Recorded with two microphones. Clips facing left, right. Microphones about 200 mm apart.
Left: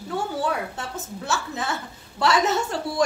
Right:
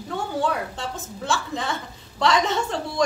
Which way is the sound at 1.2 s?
5° left (ahead or behind).